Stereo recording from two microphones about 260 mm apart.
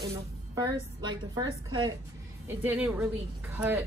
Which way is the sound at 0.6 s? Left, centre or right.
Centre.